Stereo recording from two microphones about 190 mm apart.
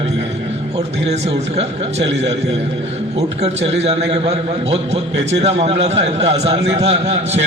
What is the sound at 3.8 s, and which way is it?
A man's voice, 30° right (ahead or behind).